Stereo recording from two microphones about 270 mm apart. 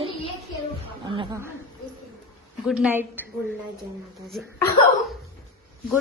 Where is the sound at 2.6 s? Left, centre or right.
Centre.